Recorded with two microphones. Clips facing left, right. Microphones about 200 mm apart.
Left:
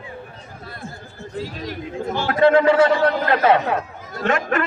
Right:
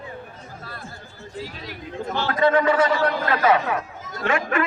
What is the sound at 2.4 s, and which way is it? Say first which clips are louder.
Speech: left 5 dB; 25° left (ahead or behind).